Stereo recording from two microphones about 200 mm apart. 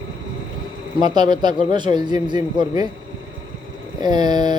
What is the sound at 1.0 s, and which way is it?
A man's voice, 20° right (ahead or behind).